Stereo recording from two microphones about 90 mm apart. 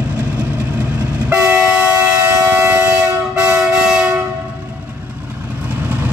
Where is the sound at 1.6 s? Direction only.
10° right (ahead or behind).